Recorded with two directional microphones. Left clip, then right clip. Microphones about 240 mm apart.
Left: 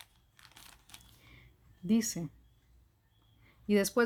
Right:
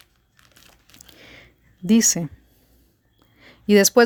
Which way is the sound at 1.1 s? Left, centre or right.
Right.